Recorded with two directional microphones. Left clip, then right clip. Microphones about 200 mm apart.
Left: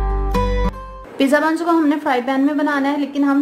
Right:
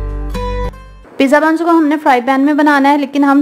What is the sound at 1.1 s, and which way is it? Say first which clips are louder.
A woman's voice: right 6 dB; 25° right (ahead or behind).